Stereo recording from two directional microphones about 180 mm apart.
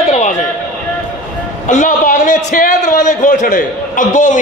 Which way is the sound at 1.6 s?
45° left (ahead or behind).